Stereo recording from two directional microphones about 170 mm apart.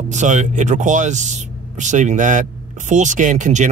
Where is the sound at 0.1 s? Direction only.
45° right (ahead or behind).